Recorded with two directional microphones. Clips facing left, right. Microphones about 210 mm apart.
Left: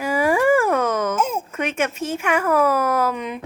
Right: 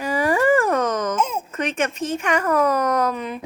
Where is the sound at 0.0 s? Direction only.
10° left (ahead or behind).